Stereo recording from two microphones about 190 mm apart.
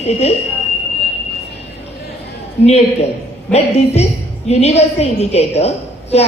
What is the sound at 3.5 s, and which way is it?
Speech, 5° left (ahead or behind).